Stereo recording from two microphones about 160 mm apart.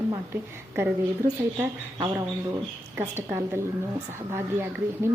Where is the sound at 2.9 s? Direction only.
15° right (ahead or behind).